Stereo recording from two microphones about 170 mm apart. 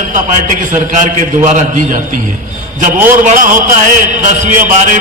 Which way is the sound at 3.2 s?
50° right (ahead or behind).